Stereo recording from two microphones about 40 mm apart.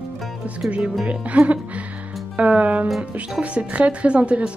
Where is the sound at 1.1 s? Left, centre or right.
Right.